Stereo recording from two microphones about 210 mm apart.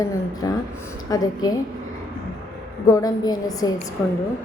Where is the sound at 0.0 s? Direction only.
15° left (ahead or behind).